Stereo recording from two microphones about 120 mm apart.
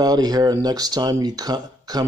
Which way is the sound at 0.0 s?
30° right (ahead or behind).